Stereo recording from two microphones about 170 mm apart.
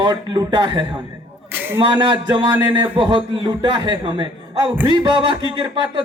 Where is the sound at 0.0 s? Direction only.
25° right (ahead or behind).